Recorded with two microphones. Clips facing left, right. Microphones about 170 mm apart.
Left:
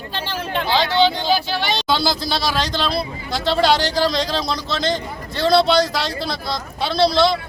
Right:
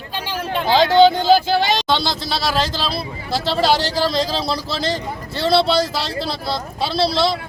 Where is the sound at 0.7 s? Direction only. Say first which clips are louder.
Right 6 dB; 45° right (ahead or behind).